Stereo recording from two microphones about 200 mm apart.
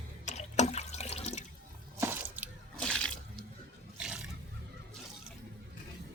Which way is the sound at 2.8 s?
5° left (ahead or behind).